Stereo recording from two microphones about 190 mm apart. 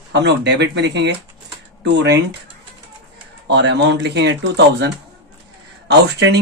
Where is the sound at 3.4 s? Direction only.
65° right (ahead or behind).